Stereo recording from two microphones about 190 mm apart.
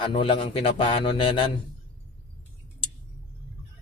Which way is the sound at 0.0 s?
25° left (ahead or behind).